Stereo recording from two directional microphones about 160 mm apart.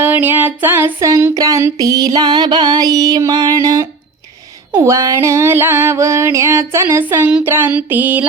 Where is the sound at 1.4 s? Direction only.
20° right (ahead or behind).